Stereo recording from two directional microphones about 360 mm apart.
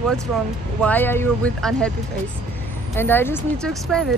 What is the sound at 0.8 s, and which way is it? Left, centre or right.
Speech, centre.